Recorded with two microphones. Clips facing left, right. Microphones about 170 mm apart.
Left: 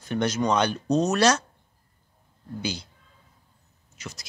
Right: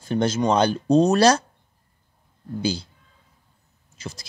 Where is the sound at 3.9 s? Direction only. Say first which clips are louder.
Right 4 dB; 30° right (ahead or behind).